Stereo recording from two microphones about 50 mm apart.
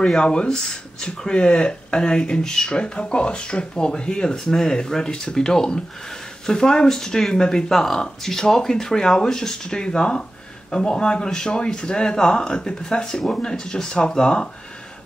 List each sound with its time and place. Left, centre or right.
0.1 s speech: centre